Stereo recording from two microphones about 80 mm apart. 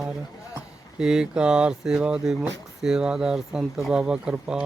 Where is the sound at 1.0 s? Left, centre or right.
Centre.